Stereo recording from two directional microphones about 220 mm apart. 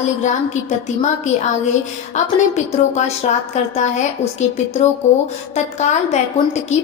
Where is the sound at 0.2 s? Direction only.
35° left (ahead or behind).